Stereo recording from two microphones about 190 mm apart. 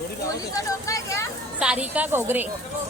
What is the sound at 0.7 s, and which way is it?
Speech, 15° left (ahead or behind).